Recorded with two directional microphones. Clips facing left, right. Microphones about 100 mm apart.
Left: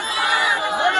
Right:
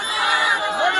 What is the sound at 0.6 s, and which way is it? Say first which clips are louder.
Chatter: even; 15° left (ahead or behind).